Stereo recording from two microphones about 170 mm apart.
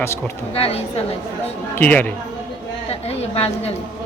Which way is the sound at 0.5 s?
35° left (ahead or behind).